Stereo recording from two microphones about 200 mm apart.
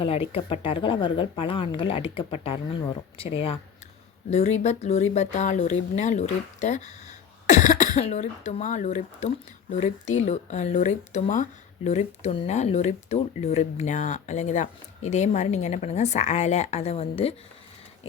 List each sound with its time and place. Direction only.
0.0 s speech: 30° left (ahead or behind)